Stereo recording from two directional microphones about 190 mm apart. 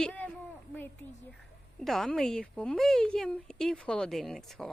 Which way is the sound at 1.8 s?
Centre (ahead or behind).